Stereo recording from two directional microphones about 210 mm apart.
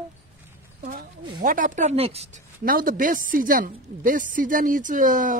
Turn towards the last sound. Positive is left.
turn(degrees=-40)  # may be behind; listen again after turning